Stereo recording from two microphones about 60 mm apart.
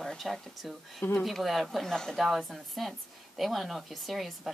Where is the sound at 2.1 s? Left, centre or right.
Centre.